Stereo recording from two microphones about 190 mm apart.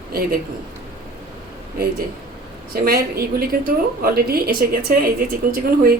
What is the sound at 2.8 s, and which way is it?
A woman's voice, 55° right (ahead or behind).